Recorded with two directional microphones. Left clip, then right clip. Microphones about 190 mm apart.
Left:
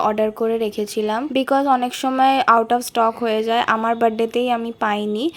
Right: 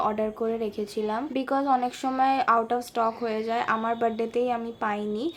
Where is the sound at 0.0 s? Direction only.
35° left (ahead or behind).